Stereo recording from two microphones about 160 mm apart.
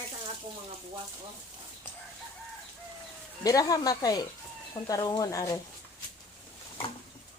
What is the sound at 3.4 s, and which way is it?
Speech, 20° left (ahead or behind).